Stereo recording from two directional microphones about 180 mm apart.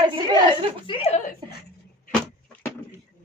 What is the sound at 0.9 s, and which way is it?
Speech, 35° left (ahead or behind).